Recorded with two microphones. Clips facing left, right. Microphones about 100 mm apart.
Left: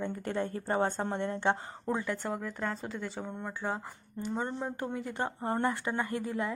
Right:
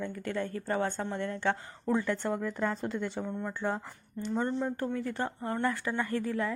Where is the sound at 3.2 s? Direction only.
10° left (ahead or behind).